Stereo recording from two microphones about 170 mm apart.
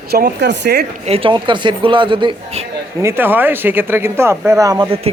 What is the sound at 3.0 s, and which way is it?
Speech, 15° right (ahead or behind).